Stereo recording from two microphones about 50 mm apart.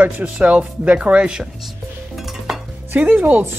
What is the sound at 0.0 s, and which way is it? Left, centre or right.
Speech, right.